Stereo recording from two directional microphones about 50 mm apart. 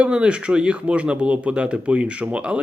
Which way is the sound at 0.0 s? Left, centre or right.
Right.